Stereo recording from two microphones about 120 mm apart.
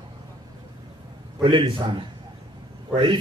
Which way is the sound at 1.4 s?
45° right (ahead or behind).